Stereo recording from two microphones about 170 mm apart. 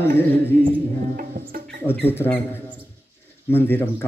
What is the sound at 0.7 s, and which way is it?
Music, 60° right (ahead or behind).